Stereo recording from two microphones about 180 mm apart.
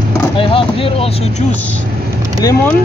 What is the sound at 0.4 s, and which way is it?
Vehicle, 30° left (ahead or behind).